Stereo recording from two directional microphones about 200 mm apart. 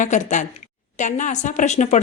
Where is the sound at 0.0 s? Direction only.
40° left (ahead or behind).